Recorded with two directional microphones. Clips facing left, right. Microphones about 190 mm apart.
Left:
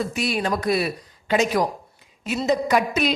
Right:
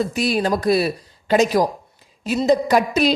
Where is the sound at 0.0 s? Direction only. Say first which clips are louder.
Right 4 dB; 35° right (ahead or behind).